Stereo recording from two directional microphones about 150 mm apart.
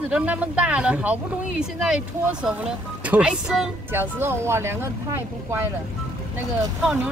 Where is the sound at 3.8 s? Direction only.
15° right (ahead or behind).